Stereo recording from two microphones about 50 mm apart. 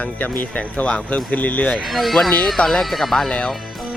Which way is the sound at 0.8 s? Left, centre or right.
Centre.